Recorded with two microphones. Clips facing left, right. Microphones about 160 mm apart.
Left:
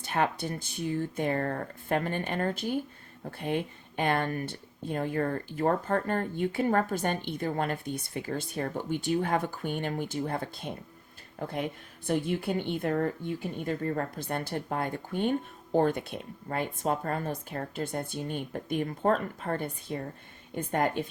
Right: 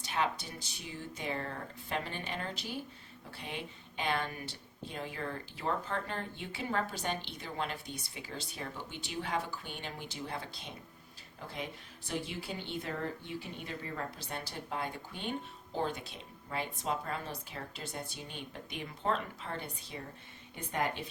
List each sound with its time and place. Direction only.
0.0 s speech: 55° left (ahead or behind)